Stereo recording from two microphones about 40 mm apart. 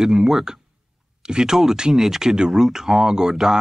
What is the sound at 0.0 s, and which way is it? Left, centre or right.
Speech, centre.